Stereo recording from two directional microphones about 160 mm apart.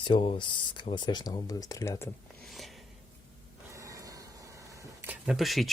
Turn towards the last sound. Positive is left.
turn(degrees=0)  # may be behind; listen again after turning